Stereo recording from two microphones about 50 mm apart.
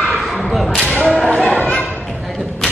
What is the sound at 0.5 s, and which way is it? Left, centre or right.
Whip, centre.